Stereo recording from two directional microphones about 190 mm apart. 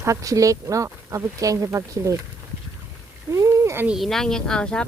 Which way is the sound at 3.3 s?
15° right (ahead or behind).